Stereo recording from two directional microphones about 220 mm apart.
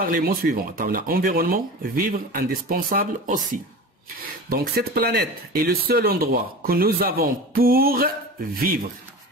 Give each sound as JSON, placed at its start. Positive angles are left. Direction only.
{"t": 0.0, "sound": "speech", "side_deg": -40}
{"t": 4.5, "sound": "speech", "side_deg": -45}